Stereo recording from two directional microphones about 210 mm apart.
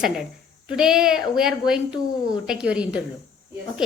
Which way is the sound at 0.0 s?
Centre (ahead or behind).